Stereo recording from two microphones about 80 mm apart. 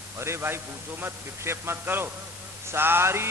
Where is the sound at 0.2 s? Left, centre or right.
Right.